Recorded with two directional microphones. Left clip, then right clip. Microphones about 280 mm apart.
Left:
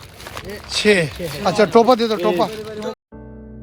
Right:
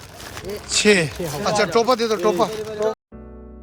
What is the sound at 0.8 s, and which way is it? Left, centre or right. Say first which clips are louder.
Speech: left 1 dB; centre.